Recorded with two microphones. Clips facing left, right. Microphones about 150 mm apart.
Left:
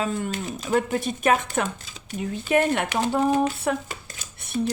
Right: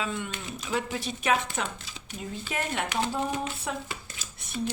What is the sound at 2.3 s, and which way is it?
Speech, 60° left (ahead or behind).